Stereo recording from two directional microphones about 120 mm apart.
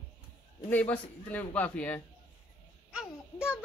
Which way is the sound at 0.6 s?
15° left (ahead or behind).